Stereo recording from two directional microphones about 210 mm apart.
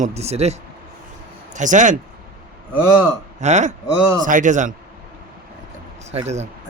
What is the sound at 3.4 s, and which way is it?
Speech, 35° right (ahead or behind).